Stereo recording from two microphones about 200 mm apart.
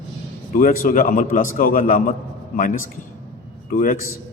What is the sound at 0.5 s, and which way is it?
A man's voice, 45° left (ahead or behind).